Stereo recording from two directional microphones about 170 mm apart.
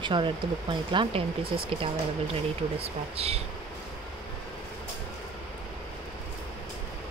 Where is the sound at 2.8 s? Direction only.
35° right (ahead or behind).